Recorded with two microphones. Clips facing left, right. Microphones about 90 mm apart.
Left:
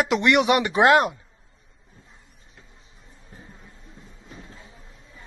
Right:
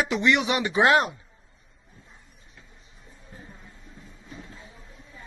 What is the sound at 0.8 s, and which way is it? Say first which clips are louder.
Speech: left 3 dB; 40° left (ahead or behind).